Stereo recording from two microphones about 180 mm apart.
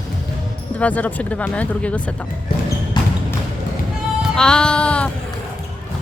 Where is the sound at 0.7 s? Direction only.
10° left (ahead or behind).